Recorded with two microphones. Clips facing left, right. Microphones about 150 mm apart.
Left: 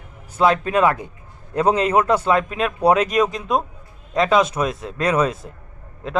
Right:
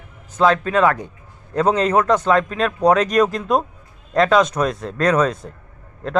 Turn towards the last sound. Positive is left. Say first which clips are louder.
# right 3 dB
turn(degrees=0)  # may be behind; listen again after turning